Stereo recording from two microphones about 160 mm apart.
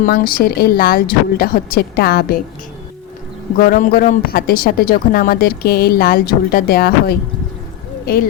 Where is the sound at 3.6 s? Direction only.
65° left (ahead or behind).